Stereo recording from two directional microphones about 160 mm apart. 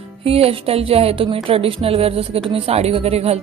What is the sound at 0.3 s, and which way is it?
Music, 35° right (ahead or behind).